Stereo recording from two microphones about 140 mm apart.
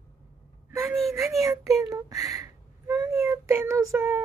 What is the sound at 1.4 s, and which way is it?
A child's voice, 20° right (ahead or behind).